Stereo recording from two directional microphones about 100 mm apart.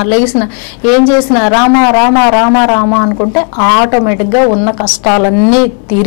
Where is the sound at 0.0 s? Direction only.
15° left (ahead or behind).